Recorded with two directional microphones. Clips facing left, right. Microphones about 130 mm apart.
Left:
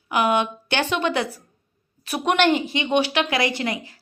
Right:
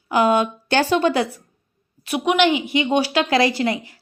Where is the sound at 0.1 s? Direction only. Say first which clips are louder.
Right 3 dB; 30° right (ahead or behind).